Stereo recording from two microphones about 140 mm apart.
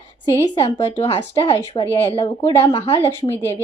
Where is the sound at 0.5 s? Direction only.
40° left (ahead or behind).